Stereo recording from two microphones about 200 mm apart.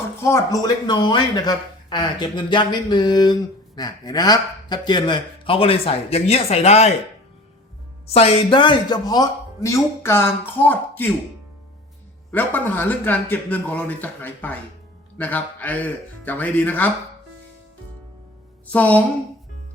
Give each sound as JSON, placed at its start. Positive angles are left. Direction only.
{"t": 0.2, "sound": "speech", "side_deg": 15}
{"t": 8.0, "sound": "speech", "side_deg": 30}
{"t": 12.3, "sound": "speech", "side_deg": 10}
{"t": 18.7, "sound": "speech", "side_deg": 5}